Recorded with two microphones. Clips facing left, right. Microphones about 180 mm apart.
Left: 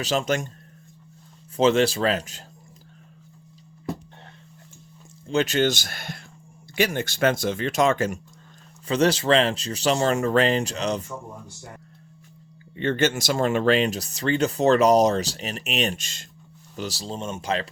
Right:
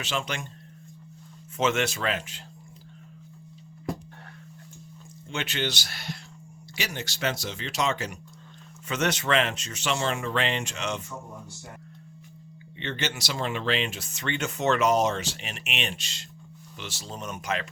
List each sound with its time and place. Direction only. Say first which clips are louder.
0.0 s speech: left 8 dB; 40° left (ahead or behind)
1.5 s speech: left 7 dB; 35° left (ahead or behind)
5.3 s speech: left 10 dB; 40° left (ahead or behind)
8.9 s speech: left 6 dB; 30° left (ahead or behind)
12.7 s speech: left 10 dB; 45° left (ahead or behind); by 17.7 s 30° left (ahead or behind)